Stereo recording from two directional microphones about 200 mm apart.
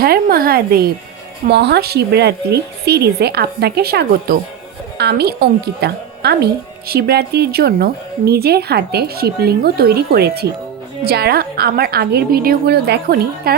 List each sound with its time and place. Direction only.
0.0 s a woman's voice: 50° right (ahead or behind)